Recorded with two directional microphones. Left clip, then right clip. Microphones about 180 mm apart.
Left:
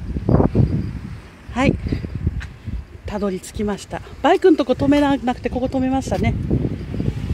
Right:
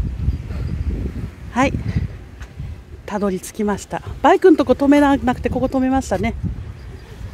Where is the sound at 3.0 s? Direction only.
10° right (ahead or behind).